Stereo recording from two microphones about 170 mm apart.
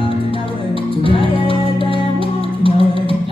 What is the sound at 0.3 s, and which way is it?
Music, 30° left (ahead or behind).